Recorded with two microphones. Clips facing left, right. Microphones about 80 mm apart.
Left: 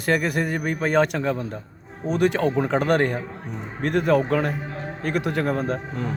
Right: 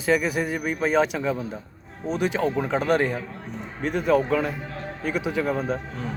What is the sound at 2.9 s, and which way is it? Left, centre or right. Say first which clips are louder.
Speech: even; left.